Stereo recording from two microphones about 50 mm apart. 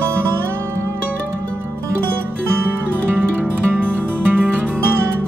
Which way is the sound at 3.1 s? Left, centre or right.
Right.